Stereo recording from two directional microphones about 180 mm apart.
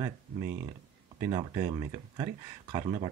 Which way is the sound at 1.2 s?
20° right (ahead or behind).